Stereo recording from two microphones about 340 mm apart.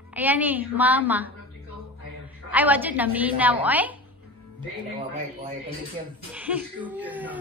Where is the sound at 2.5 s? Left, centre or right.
Centre.